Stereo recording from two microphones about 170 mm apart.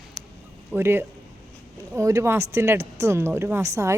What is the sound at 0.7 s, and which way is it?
Speech, 15° right (ahead or behind).